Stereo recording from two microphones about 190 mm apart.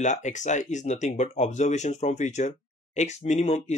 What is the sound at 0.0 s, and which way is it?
Speech, 40° left (ahead or behind).